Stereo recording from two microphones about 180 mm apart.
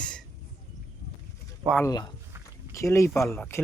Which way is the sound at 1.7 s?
20° left (ahead or behind).